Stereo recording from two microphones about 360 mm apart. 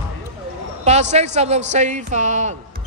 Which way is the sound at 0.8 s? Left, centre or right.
Centre.